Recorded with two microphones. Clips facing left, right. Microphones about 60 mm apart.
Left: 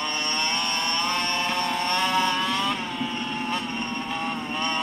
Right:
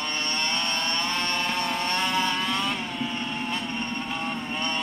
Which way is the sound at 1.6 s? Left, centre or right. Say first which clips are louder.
Left 2 dB; left.